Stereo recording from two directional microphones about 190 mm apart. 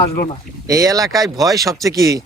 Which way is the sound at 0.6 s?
20° right (ahead or behind).